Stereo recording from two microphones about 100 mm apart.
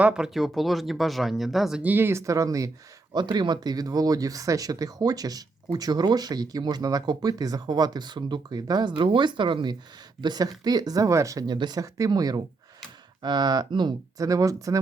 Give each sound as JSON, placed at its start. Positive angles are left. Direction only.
{"t": 0.0, "sound": "speech", "side_deg": -5}
{"t": 1.8, "sound": "speech", "side_deg": -20}
{"t": 3.1, "sound": "speech", "side_deg": -45}
{"t": 9.0, "sound": "speech", "side_deg": -55}
{"t": 11.5, "sound": "speech", "side_deg": -50}
{"t": 11.8, "sound": "speech", "side_deg": -35}
{"t": 14.2, "sound": "speech", "side_deg": -35}